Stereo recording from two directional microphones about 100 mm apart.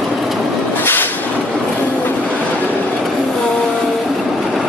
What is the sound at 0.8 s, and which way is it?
Vehicle, 20° left (ahead or behind).